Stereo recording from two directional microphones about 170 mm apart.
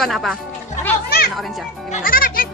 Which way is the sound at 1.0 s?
65° left (ahead or behind).